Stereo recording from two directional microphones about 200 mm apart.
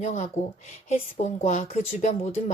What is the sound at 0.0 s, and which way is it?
A woman's voice, 35° left (ahead or behind).